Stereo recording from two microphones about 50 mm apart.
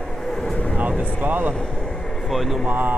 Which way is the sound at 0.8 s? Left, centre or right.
Right.